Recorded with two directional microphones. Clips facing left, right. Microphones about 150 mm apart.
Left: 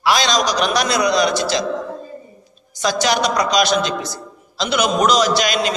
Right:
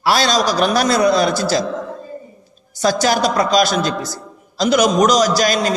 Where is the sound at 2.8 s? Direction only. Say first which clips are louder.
Right 2 dB; 45° right (ahead or behind).